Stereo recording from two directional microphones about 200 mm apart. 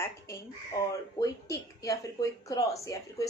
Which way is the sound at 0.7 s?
20° left (ahead or behind).